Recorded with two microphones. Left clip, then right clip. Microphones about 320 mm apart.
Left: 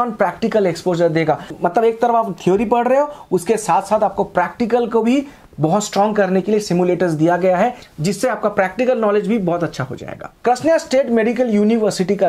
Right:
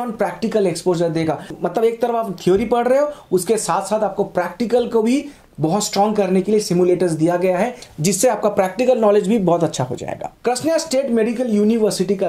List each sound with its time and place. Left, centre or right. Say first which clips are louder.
0.2 s speech: even; left
1.8 s speech: left 3 dB; left
3.4 s speech: left 5 dB; left
8.0 s speech: right 2 dB; centre
10.4 s speech: left 4 dB; left